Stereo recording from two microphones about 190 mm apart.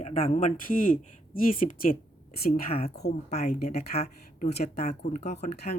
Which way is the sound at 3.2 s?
35° left (ahead or behind).